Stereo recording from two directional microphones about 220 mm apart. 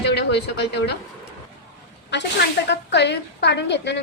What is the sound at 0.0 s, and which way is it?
Speech, 50° left (ahead or behind).